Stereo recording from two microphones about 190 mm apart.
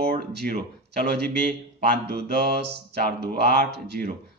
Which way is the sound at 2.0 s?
60° right (ahead or behind).